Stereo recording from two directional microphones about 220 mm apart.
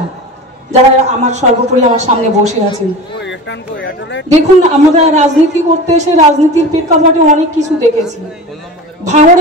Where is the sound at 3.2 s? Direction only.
55° left (ahead or behind).